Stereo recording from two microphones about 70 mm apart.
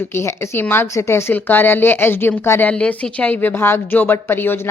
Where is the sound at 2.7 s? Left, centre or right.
Centre.